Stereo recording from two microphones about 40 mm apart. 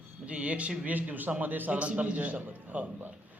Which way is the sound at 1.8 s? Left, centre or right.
Right.